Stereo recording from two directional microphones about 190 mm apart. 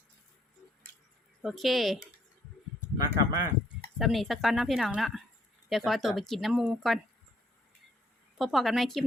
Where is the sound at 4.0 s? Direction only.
Centre (ahead or behind).